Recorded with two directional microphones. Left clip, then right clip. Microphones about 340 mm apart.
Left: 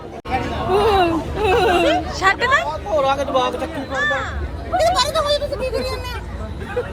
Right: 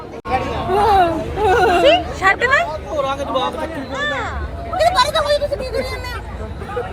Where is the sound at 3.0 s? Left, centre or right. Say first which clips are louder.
Left 1 dB; centre.